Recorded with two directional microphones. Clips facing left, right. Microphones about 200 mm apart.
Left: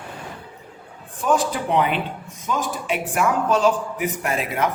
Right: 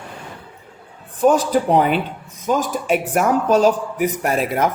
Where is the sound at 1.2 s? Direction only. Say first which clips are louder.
Right 6 dB; 40° right (ahead or behind).